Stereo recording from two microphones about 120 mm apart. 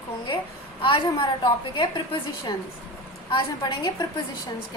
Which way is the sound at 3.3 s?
40° left (ahead or behind).